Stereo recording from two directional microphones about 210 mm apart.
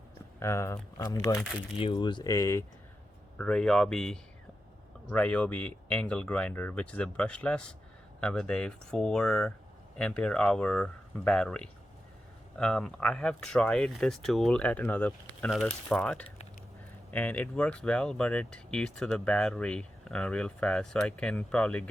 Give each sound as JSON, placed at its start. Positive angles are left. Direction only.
{"t": 0.3, "sound": "speech", "side_deg": 15}